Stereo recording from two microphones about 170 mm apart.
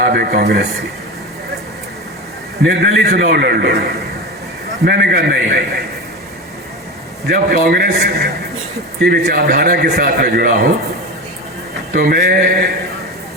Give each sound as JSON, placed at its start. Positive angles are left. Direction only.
{"t": 0.0, "sound": "a man's voice", "side_deg": -65}
{"t": 2.6, "sound": "a man's voice", "side_deg": -70}
{"t": 4.9, "sound": "a man's voice", "side_deg": -70}
{"t": 7.3, "sound": "a man's voice", "side_deg": -60}
{"t": 11.9, "sound": "a man's voice", "side_deg": -65}